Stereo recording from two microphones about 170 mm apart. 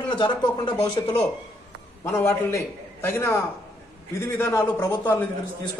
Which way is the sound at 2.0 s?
15° left (ahead or behind).